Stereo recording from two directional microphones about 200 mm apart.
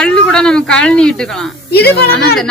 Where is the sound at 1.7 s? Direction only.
55° left (ahead or behind).